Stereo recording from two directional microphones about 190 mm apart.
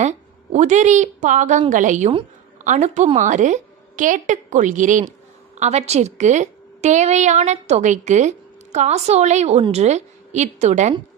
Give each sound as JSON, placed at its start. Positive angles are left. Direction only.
{"t": 0.0, "sound": "a woman's voice", "side_deg": -40}